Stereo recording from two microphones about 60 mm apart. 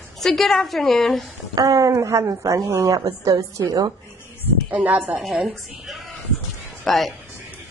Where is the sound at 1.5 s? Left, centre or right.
Right.